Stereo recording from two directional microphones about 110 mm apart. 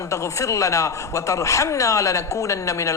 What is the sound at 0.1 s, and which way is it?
A woman's voice, 25° left (ahead or behind).